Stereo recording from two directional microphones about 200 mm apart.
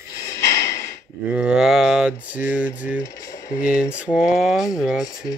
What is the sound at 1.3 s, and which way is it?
Mantra, 5° right (ahead or behind).